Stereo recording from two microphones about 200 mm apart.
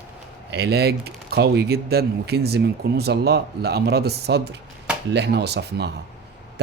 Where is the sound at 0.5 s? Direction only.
55° right (ahead or behind).